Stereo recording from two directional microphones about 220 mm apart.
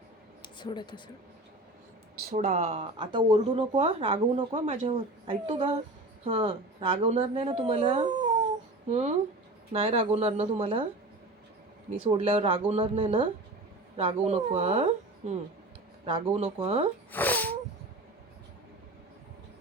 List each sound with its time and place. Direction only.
0.4 s speech: 20° left (ahead or behind)
2.2 s speech: 30° right (ahead or behind)
12.0 s speech: 25° right (ahead or behind)
17.1 s a sound: 10° left (ahead or behind)